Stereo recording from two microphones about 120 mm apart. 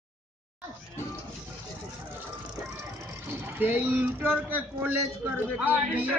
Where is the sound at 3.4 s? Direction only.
15° right (ahead or behind).